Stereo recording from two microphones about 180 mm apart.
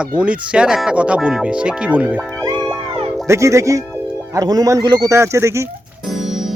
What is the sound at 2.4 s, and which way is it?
Music, 20° right (ahead or behind).